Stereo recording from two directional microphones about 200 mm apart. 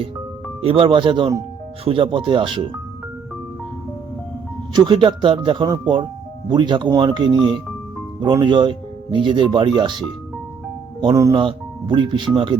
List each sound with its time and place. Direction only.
0.6 s speech: 25° right (ahead or behind)
4.7 s speech: 25° right (ahead or behind)
11.0 s speech: 15° right (ahead or behind)